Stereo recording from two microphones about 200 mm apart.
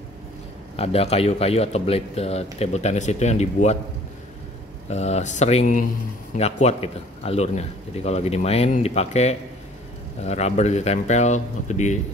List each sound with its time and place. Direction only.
0.7 s a man's voice: 30° left (ahead or behind)
4.8 s a man's voice: 35° left (ahead or behind)